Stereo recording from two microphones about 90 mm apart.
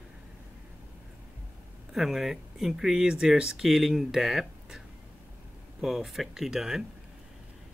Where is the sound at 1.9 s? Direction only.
5° right (ahead or behind).